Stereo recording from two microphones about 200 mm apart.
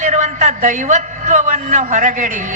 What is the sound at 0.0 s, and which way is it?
A man's voice, 40° right (ahead or behind).